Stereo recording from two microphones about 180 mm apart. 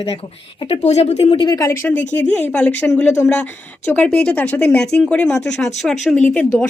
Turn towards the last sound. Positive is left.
turn(degrees=5)  # may be behind; listen again after turning